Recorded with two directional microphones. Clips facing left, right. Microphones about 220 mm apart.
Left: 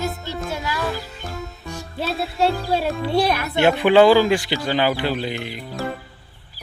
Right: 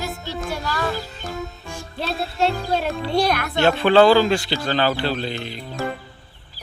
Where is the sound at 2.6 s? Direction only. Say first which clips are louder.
Left 1 dB; centre (ahead or behind).